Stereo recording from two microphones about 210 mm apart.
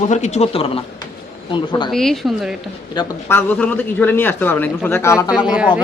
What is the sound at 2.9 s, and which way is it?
Speech, 20° left (ahead or behind).